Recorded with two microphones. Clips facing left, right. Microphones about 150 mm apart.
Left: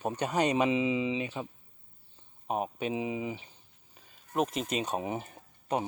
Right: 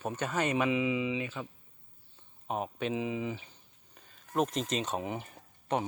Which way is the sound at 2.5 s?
15° left (ahead or behind).